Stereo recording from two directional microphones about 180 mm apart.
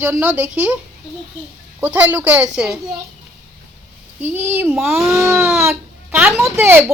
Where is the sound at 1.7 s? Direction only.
10° right (ahead or behind).